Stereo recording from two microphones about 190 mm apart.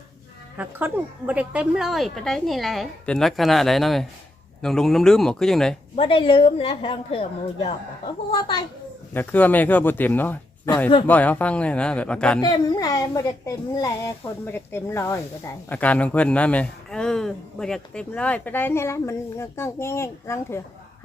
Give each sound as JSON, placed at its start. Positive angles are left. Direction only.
{"t": 0.5, "sound": "a woman's voice", "side_deg": -10}
{"t": 6.0, "sound": "a woman's voice", "side_deg": 25}
{"t": 9.1, "sound": "a man's voice", "side_deg": 10}
{"t": 12.4, "sound": "a man's voice", "side_deg": 20}